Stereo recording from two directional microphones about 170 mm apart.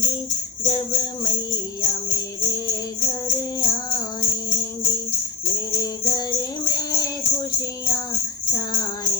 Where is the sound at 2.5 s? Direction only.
20° left (ahead or behind).